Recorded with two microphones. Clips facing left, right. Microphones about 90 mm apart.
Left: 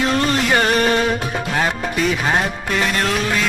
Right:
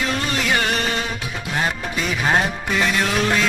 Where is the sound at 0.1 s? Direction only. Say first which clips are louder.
Left 5 dB; 40° left (ahead or behind).